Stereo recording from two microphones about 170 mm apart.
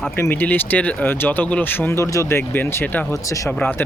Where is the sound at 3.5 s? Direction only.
10° left (ahead or behind).